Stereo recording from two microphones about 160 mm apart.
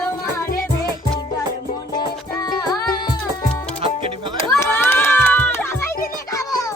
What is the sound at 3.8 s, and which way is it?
Music, 30° right (ahead or behind).